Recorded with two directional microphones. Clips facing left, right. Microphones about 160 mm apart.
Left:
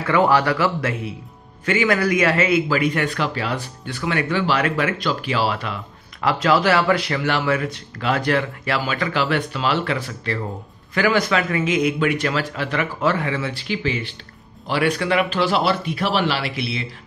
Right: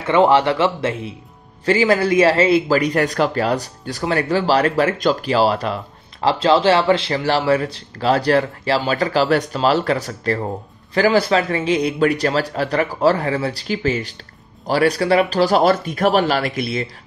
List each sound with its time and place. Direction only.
0.0 s speech: 25° right (ahead or behind); by 16.8 s 45° right (ahead or behind)